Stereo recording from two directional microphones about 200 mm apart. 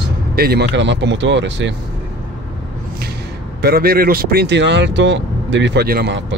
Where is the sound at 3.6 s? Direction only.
50° right (ahead or behind).